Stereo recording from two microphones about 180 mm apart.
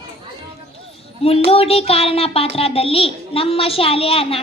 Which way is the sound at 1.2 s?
30° left (ahead or behind).